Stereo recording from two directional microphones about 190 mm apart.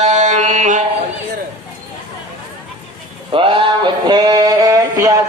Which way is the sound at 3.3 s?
25° right (ahead or behind).